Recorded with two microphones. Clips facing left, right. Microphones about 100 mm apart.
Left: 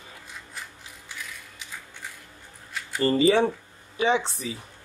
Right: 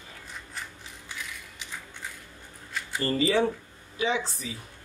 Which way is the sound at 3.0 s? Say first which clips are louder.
Left 5 dB; 25° left (ahead or behind).